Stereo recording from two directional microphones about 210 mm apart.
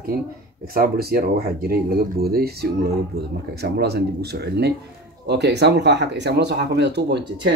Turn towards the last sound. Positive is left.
turn(degrees=-55)  # may be behind; listen again after turning